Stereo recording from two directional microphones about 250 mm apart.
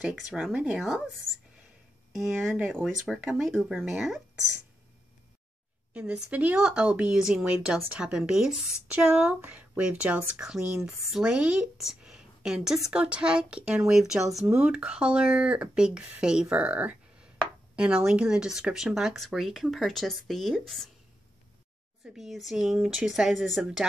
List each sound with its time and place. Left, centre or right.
0.0 s a woman's voice: centre
2.1 s a woman's voice: centre
5.9 s a woman's voice: centre
22.0 s a woman's voice: centre